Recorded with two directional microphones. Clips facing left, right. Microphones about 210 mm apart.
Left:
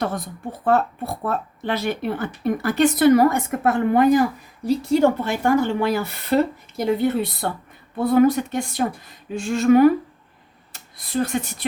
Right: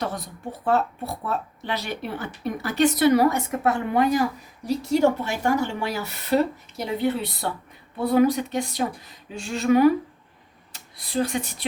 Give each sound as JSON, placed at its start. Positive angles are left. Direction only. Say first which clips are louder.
{"t": 0.0, "sound": "speech", "louder": "left 4 dB", "side_deg": 50}